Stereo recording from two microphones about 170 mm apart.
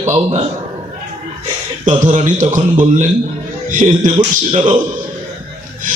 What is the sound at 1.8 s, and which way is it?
A man's voice, 50° right (ahead or behind).